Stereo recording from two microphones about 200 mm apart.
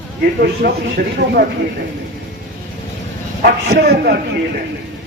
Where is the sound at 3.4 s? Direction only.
50° right (ahead or behind).